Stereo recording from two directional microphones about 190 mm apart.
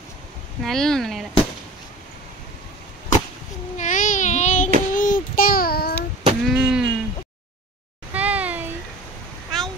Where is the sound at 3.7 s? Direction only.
40° left (ahead or behind).